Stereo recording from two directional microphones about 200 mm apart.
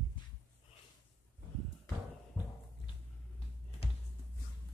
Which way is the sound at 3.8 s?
30° left (ahead or behind).